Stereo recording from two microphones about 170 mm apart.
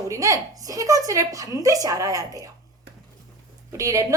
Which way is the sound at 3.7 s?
20° right (ahead or behind).